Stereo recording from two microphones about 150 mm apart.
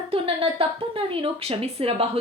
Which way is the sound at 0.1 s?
40° right (ahead or behind).